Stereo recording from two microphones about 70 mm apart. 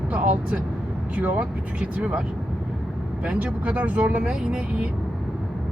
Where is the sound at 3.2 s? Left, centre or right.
Centre.